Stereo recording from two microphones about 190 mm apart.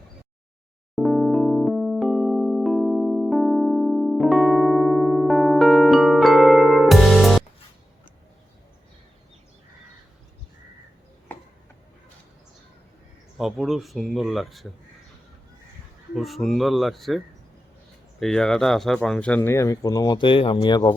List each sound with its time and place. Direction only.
0.9 s electric piano: centre (ahead or behind)
13.4 s speech: centre (ahead or behind)
16.1 s speech: centre (ahead or behind)
19.4 s speech: 15° left (ahead or behind)